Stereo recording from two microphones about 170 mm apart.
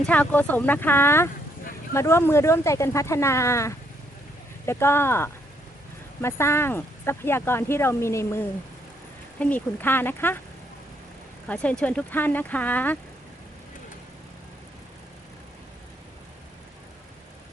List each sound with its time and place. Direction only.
0.0 s speech: 10° left (ahead or behind)
9.4 s speech: 10° left (ahead or behind)
11.4 s speech: 5° left (ahead or behind)